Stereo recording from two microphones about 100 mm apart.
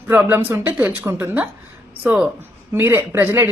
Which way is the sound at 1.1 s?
25° right (ahead or behind).